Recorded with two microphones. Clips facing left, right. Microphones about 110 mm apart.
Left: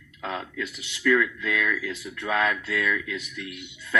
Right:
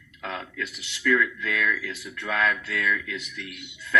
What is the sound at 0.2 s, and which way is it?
A man's voice, 25° left (ahead or behind).